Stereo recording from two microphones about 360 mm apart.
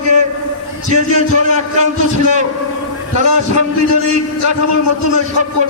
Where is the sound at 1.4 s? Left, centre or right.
Centre.